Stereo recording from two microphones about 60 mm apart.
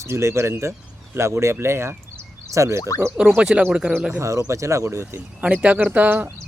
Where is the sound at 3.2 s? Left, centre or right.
Centre.